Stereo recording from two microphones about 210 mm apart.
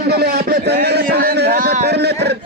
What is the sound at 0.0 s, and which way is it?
A man's voice, 50° right (ahead or behind).